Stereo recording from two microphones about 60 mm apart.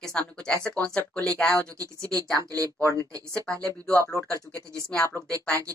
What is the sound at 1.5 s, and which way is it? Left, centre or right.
Speech, right.